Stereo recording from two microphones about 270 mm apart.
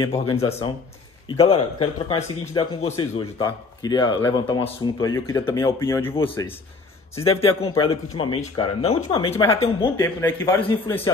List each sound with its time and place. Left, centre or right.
0.1 s a man's voice: left
7.2 s a man's voice: left